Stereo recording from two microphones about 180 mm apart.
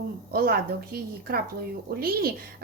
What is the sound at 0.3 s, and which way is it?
A woman's voice, 55° right (ahead or behind).